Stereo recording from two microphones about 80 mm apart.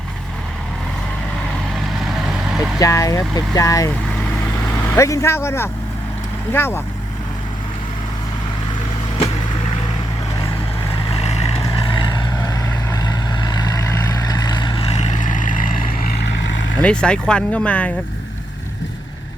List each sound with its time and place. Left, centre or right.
2.2 s vehicle: centre
2.7 s speech: left
4.9 s a man's voice: left
11.9 s vehicle: left
12.4 s vehicle: left
16.8 s speech: centre